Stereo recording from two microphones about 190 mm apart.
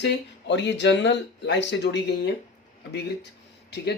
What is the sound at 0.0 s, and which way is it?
Speech, 65° left (ahead or behind).